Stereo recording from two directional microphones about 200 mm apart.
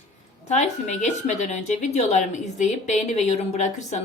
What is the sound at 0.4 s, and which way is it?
A woman's voice, 35° left (ahead or behind).